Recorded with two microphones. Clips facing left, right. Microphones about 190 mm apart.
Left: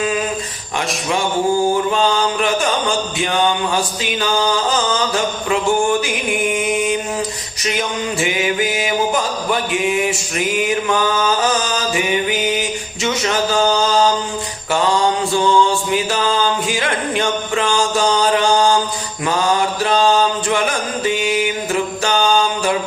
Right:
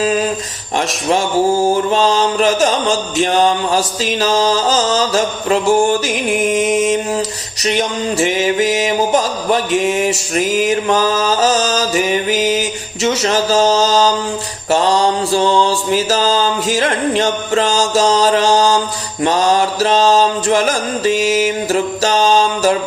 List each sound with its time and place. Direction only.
0.0 s mantra: 35° right (ahead or behind)
1.9 s mantra: 35° right (ahead or behind)